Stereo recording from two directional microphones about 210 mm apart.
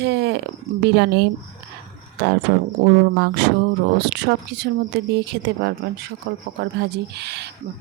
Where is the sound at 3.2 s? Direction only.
55° right (ahead or behind).